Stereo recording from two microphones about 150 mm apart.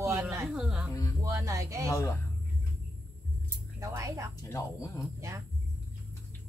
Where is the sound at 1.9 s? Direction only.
20° left (ahead or behind).